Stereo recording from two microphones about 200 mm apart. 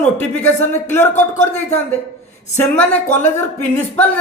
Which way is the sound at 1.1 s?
35° left (ahead or behind).